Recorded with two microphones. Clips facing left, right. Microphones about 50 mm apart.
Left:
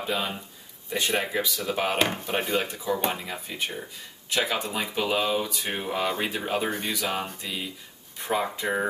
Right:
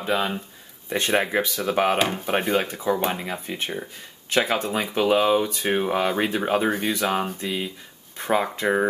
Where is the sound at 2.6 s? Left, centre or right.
Right.